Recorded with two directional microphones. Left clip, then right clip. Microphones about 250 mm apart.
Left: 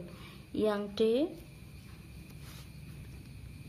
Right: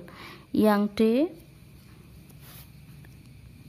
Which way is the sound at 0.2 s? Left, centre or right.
Right.